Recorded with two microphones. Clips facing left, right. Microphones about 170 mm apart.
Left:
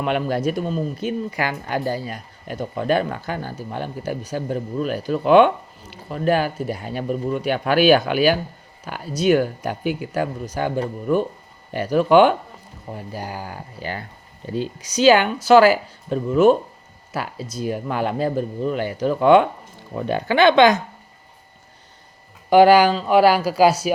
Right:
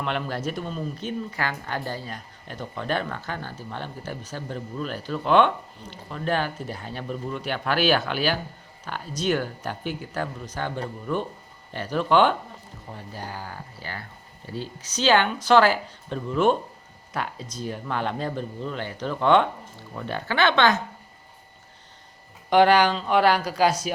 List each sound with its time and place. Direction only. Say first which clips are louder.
0.0 s speech: left 7 dB; 15° left (ahead or behind)
22.4 s speech: left 5 dB; 5° left (ahead or behind)